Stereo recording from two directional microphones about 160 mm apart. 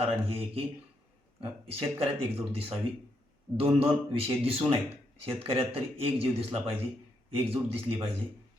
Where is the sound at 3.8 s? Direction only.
35° right (ahead or behind).